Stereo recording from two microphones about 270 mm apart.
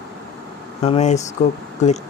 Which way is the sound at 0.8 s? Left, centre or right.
Left.